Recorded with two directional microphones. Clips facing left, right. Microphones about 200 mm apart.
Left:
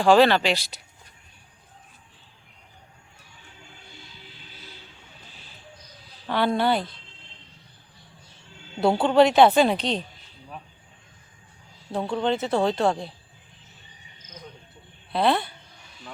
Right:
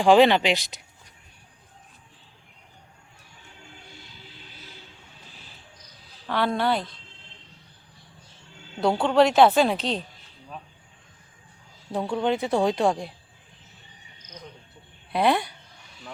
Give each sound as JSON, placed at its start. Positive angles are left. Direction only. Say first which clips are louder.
{"t": 0.0, "sound": "speech", "louder": "right 1 dB", "side_deg": -15}
{"t": 6.2, "sound": "a woman's voice", "louder": "left 2 dB", "side_deg": 0}
{"t": 8.8, "sound": "a woman's voice", "louder": "left 2 dB", "side_deg": 5}
{"t": 12.1, "sound": "speech", "louder": "even", "side_deg": -10}
{"t": 15.1, "sound": "speech", "louder": "even", "side_deg": -15}